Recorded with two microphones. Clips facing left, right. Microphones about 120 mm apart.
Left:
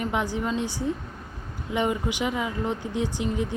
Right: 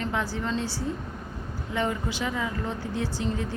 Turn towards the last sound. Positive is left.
turn(degrees=15)  # may be behind; listen again after turning